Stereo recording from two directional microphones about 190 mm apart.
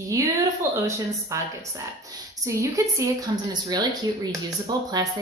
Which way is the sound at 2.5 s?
15° right (ahead or behind).